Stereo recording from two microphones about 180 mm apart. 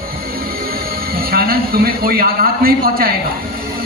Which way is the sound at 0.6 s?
55° right (ahead or behind).